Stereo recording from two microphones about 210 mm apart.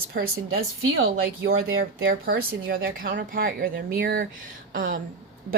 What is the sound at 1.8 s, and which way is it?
Speech, 45° right (ahead or behind).